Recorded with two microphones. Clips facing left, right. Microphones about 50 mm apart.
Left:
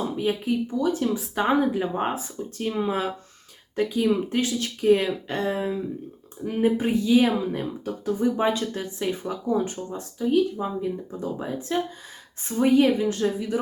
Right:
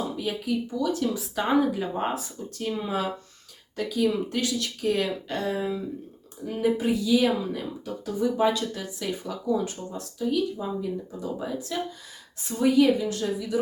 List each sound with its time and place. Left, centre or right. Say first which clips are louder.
0.2 s speech: left 4 dB; left